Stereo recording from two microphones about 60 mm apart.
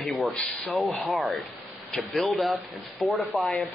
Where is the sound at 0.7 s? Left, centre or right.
Centre.